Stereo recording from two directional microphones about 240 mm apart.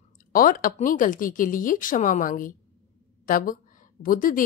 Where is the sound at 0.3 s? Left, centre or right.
Left.